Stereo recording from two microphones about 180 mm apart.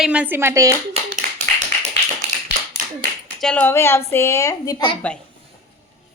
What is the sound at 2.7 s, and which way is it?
Clapping, 70° left (ahead or behind).